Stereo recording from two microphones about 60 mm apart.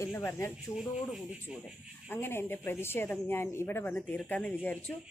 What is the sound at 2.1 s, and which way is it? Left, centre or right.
Speech, left.